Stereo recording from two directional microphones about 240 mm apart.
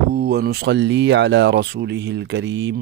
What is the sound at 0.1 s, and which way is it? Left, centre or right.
Speech, right.